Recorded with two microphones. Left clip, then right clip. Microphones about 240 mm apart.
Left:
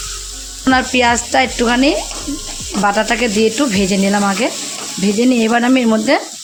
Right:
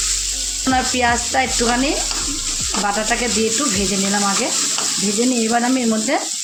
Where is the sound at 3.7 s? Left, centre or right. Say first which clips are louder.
Left 4 dB; left.